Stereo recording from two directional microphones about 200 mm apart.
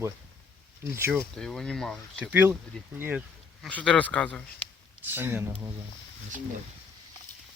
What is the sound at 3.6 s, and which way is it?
Speech, 5° left (ahead or behind).